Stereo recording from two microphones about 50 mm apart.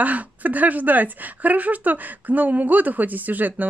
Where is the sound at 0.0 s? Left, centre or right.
Right.